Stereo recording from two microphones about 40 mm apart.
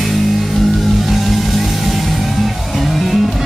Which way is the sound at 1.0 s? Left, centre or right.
Centre.